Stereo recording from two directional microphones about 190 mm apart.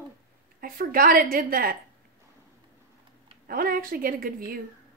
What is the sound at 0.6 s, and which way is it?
A woman's voice, 50° right (ahead or behind).